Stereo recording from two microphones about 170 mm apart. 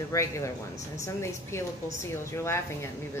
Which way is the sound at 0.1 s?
20° left (ahead or behind).